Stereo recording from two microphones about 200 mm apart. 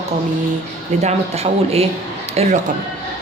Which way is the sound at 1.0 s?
30° right (ahead or behind).